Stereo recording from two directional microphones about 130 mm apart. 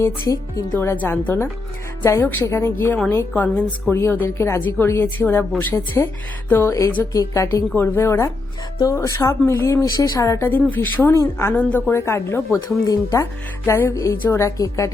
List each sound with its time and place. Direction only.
0.0 s a woman's voice: 25° left (ahead or behind)